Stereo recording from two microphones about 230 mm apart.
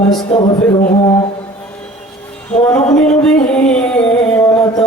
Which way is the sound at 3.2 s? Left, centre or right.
Centre.